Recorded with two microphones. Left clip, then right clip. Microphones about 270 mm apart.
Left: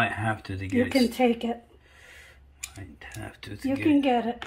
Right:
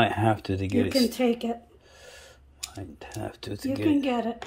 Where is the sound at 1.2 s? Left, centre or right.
Centre.